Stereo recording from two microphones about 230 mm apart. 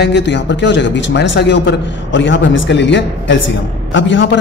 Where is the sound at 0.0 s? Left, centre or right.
Left.